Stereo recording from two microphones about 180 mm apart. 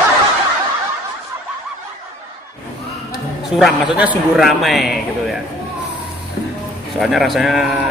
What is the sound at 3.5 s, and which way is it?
A man's voice, 5° right (ahead or behind).